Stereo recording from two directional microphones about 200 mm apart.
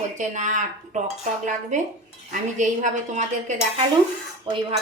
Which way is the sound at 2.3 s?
40° right (ahead or behind).